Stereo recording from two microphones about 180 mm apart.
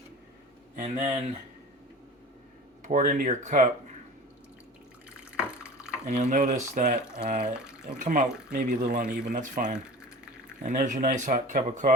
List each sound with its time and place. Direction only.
0.8 s speech: 40° right (ahead or behind)
2.8 s speech: 45° right (ahead or behind)
5.5 s a sound: 5° right (ahead or behind)
6.1 s speech: 40° right (ahead or behind)
7.5 s speech: 5° right (ahead or behind)
7.9 s speech: 45° right (ahead or behind)